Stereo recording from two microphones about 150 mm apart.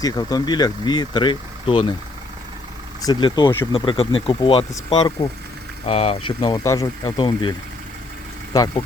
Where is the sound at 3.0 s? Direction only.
30° left (ahead or behind).